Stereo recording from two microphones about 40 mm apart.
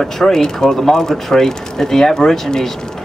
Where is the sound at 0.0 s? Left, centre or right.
Centre.